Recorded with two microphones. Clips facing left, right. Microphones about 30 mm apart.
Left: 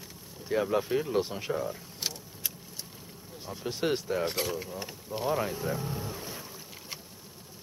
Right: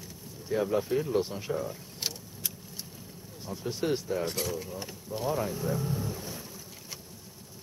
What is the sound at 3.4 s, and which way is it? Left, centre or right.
Speech, centre.